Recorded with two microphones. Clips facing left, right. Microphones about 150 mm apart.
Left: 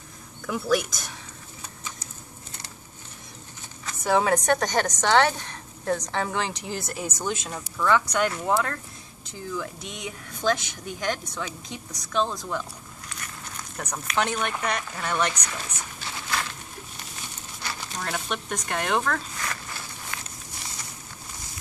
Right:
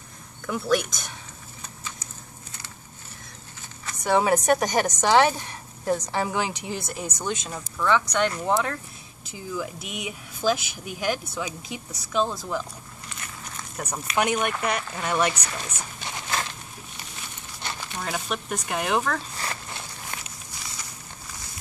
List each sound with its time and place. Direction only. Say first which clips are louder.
0.5 s a woman's voice: even; centre (ahead or behind)
3.8 s a woman's voice: right 1 dB; centre (ahead or behind)
13.1 s a sound: right 1 dB; 5° right (ahead or behind)
14.6 s speech: right 2 dB; 5° right (ahead or behind)
16.0 s a sound: right 1 dB; 25° right (ahead or behind)
17.9 s a woman's voice: right 1 dB; 5° right (ahead or behind)
19.3 s walk: right 1 dB; 30° right (ahead or behind)